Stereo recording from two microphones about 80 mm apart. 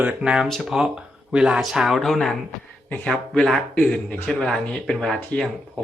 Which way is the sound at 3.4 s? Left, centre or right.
Centre.